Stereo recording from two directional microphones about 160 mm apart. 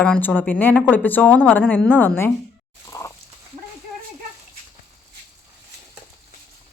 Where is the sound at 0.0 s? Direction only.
10° left (ahead or behind).